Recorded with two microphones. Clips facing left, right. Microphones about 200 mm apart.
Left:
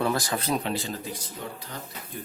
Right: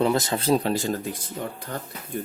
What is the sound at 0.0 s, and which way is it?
Speech, 25° right (ahead or behind).